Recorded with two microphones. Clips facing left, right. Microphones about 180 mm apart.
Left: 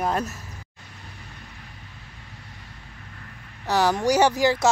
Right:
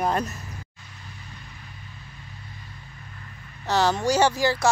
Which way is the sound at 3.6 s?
10° left (ahead or behind).